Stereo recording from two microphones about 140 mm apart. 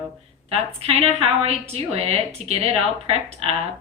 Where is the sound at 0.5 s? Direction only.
45° right (ahead or behind).